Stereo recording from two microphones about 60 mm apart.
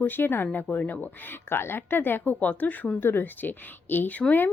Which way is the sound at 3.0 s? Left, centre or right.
Left.